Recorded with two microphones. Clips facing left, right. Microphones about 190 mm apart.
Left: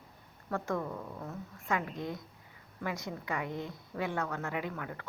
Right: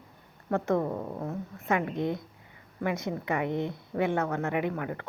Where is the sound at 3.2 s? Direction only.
60° right (ahead or behind).